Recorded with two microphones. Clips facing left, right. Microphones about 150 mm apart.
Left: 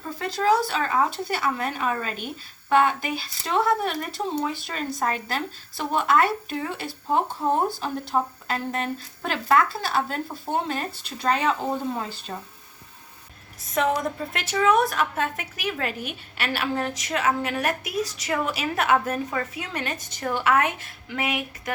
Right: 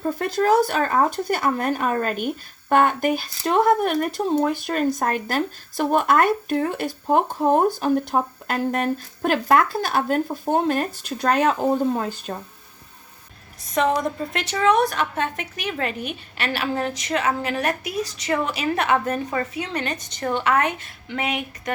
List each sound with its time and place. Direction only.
0.0 s speech: 50° right (ahead or behind)
13.7 s a woman's voice: 5° left (ahead or behind)